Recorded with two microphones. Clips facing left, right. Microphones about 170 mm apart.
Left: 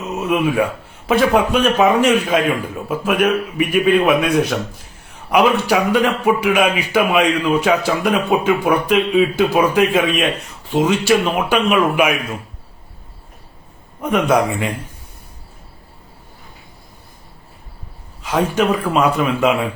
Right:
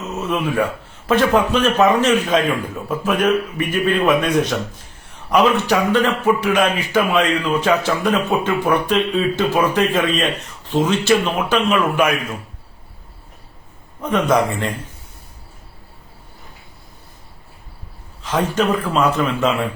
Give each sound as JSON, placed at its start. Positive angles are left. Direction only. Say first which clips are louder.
{"t": 0.2, "sound": "a man's voice", "louder": "left 3 dB", "side_deg": 10}
{"t": 14.0, "sound": "a man's voice", "louder": "left 1 dB", "side_deg": 10}
{"t": 18.2, "sound": "a man's voice", "louder": "left 2 dB", "side_deg": 10}